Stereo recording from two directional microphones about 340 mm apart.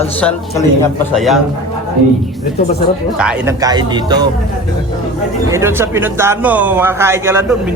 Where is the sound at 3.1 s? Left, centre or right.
Centre.